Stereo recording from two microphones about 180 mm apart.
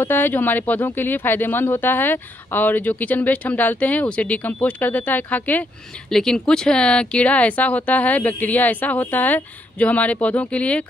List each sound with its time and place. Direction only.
0.0 s speech: 10° left (ahead or behind)